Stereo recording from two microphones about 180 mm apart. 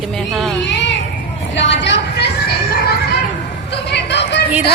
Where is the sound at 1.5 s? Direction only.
85° left; by 4.4 s 70° left (ahead or behind).